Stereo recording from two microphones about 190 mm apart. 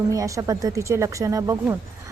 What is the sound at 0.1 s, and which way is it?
Speech, 15° right (ahead or behind).